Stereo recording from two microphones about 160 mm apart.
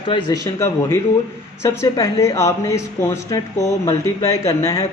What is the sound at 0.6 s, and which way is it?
Speech, 15° left (ahead or behind).